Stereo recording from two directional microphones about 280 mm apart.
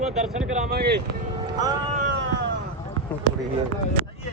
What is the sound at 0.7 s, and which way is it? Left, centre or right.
Speech, right.